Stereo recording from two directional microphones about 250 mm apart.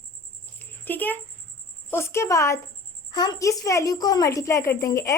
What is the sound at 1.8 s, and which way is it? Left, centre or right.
A woman's voice, centre.